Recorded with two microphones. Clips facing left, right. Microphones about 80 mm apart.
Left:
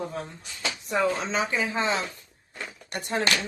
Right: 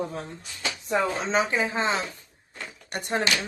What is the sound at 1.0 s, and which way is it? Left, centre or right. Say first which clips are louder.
Speech: left 1 dB; right.